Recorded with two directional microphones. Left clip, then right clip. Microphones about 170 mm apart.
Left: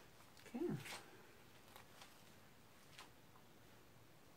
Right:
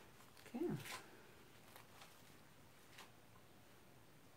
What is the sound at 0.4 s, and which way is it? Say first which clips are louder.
Dog: right 1 dB; 10° right (ahead or behind).